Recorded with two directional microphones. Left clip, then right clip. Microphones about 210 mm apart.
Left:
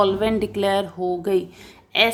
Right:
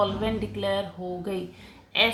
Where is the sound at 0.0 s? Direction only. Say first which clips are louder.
Left 7 dB; 55° left (ahead or behind).